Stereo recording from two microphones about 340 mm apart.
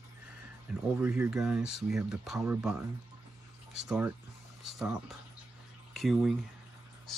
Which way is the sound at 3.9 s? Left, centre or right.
Centre.